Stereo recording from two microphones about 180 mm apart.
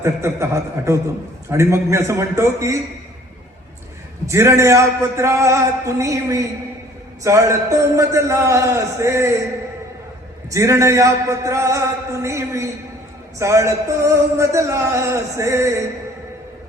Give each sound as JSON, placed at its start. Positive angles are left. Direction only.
{"t": 0.0, "sound": "music", "side_deg": -15}
{"t": 4.3, "sound": "music", "side_deg": -15}
{"t": 10.5, "sound": "music", "side_deg": -15}